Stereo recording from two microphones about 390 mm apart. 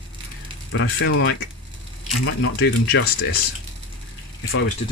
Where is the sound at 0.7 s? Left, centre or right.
Left.